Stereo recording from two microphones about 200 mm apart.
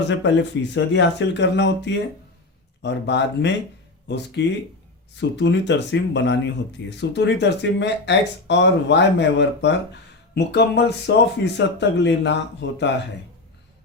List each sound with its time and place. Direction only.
0.2 s speech: 65° left (ahead or behind)